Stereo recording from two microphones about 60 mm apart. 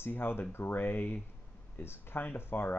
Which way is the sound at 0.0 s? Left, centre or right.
Left.